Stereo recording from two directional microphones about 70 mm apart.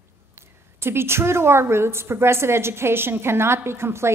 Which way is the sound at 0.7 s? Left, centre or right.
Right.